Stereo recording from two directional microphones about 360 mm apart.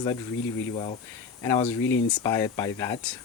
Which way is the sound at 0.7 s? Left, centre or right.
Centre.